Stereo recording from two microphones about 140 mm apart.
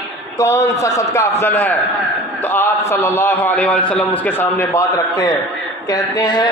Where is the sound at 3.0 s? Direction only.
15° left (ahead or behind).